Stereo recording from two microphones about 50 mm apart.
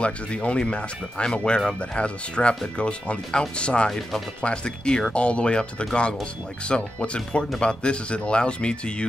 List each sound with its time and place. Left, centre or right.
0.0 s speech: left